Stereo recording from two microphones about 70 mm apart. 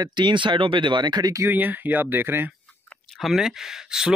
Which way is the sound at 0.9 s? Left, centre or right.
Right.